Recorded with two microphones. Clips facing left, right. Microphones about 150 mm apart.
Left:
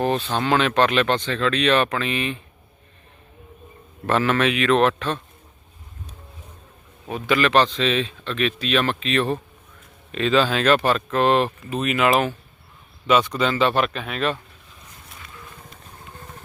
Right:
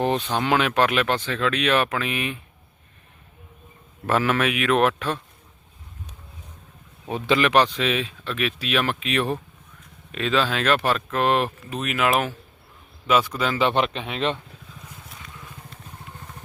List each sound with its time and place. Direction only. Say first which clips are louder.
0.0 s speech: left 1 dB; 15° right (ahead or behind)
4.0 s speech: left 2 dB; 10° right (ahead or behind)
7.1 s speech: even; 25° right (ahead or behind)